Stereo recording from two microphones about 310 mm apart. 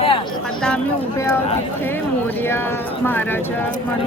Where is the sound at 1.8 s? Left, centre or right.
Centre.